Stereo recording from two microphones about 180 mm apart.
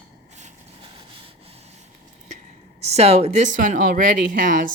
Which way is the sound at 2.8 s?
35° right (ahead or behind).